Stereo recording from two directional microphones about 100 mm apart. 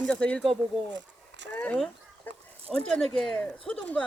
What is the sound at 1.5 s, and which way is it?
Speech, 15° left (ahead or behind).